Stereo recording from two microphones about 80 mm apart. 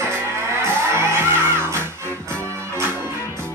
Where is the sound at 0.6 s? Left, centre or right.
Right.